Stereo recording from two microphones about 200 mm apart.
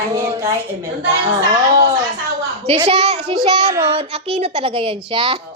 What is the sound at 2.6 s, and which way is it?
A child's voice, 30° right (ahead or behind).